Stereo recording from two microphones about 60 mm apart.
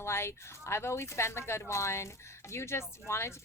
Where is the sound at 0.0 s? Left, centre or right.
Left.